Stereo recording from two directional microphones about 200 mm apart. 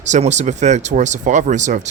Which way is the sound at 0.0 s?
35° right (ahead or behind).